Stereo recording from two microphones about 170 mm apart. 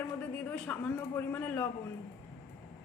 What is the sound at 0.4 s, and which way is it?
A man's voice, 5° left (ahead or behind).